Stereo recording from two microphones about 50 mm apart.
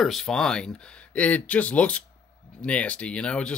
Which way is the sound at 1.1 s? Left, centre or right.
Left.